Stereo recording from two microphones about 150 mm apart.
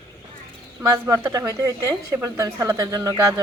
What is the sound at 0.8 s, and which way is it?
A woman's voice, 20° right (ahead or behind).